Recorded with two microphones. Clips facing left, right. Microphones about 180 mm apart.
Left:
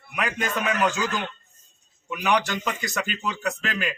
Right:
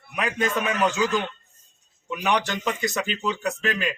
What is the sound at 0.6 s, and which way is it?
Speech, 20° right (ahead or behind).